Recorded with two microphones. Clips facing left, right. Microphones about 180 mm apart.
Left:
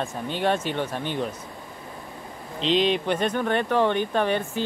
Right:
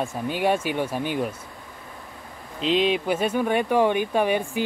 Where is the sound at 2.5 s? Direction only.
5° right (ahead or behind).